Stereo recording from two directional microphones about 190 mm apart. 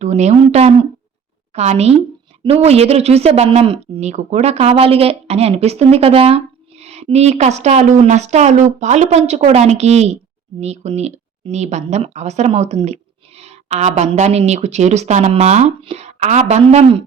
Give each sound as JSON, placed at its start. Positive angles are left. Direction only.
{"t": 0.0, "sound": "speech", "side_deg": -35}